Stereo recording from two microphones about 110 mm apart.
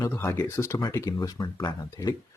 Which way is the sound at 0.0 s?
25° left (ahead or behind).